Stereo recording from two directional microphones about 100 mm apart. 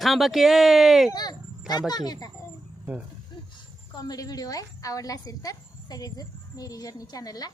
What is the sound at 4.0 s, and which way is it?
Speech, 40° left (ahead or behind).